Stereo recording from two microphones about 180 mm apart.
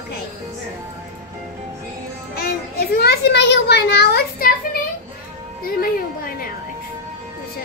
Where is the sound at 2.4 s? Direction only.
60° left (ahead or behind).